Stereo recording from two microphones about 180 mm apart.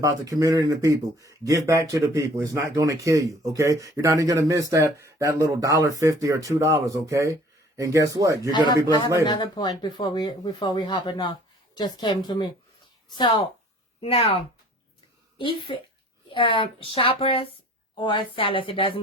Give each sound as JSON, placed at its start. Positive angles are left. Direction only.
{"t": 0.0, "sound": "speech", "side_deg": -20}
{"t": 8.5, "sound": "speech", "side_deg": 25}
{"t": 14.0, "sound": "speech", "side_deg": 35}
{"t": 15.4, "sound": "speech", "side_deg": 30}